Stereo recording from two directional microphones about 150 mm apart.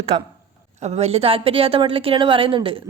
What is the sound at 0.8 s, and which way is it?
A woman's voice, 45° right (ahead or behind).